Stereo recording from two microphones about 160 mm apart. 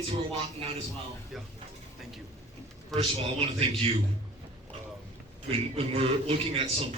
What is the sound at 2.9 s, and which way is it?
A man's voice, 35° right (ahead or behind).